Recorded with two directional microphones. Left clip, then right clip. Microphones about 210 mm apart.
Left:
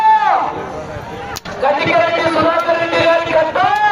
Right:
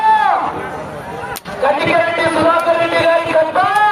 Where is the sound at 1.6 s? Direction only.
20° left (ahead or behind).